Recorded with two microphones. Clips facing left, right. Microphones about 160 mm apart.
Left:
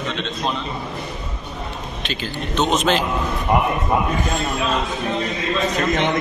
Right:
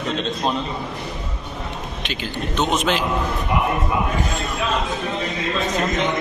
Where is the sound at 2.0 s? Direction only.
10° right (ahead or behind).